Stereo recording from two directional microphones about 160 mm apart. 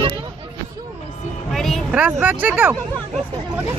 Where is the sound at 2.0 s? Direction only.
10° right (ahead or behind).